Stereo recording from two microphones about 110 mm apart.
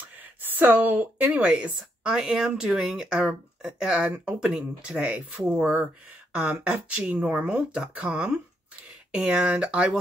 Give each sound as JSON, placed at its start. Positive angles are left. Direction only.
{"t": 0.2, "sound": "speech", "side_deg": -15}